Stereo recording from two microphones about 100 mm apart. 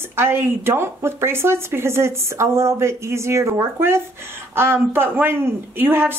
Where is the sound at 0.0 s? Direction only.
25° right (ahead or behind).